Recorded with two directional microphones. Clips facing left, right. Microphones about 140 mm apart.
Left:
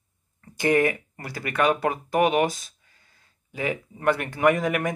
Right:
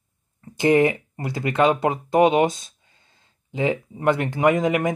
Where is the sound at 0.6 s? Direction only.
25° right (ahead or behind).